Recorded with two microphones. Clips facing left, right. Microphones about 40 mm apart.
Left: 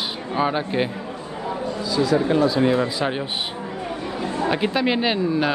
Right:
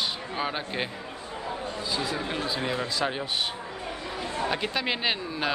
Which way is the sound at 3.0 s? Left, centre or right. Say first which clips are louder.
Left 5 dB; centre.